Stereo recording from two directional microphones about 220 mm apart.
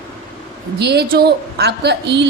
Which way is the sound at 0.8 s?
50° right (ahead or behind).